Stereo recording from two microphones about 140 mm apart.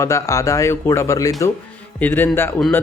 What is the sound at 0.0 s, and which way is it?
A man's voice, 20° left (ahead or behind).